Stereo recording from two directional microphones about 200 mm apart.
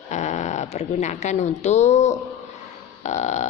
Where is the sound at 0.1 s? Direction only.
35° left (ahead or behind).